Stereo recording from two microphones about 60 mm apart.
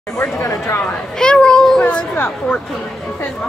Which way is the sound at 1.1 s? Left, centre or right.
Centre.